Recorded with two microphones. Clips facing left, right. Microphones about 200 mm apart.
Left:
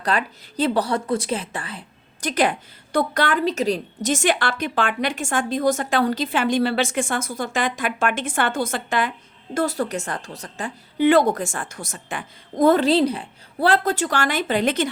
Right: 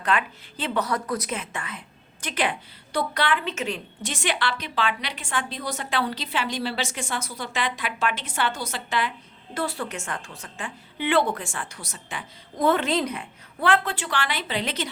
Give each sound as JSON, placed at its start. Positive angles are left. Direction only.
{"t": 0.0, "sound": "a woman's voice", "side_deg": 35}